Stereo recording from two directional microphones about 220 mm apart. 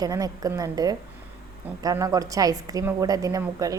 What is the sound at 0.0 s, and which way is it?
A woman's voice, 15° right (ahead or behind).